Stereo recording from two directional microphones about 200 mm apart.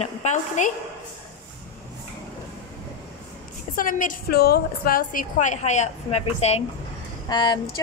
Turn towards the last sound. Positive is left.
turn(degrees=20)  # may be behind; listen again after turning